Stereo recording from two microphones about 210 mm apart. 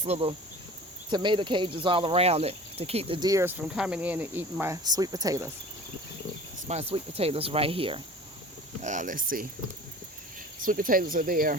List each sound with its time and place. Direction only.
0.0 s speech: 30° right (ahead or behind)
3.6 s speech: 5° right (ahead or behind)
6.7 s speech: 30° right (ahead or behind)
8.8 s speech: 35° right (ahead or behind)
10.6 s speech: 40° right (ahead or behind)